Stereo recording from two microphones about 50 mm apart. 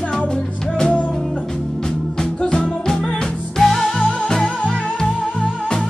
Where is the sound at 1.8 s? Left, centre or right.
Centre.